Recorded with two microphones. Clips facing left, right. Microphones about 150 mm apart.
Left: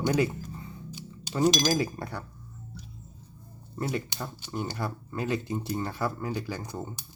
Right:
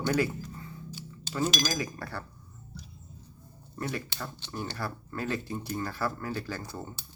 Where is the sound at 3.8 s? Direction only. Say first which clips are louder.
Left 3 dB; 20° left (ahead or behind).